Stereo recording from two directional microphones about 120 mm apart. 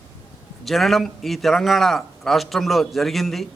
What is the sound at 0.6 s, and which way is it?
A man's voice, centre (ahead or behind).